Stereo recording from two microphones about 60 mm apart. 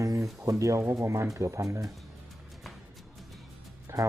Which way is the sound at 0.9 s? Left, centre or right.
Right.